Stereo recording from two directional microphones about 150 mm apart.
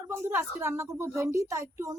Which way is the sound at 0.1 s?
15° right (ahead or behind).